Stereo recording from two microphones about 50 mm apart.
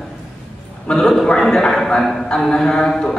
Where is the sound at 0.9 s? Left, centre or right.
Centre.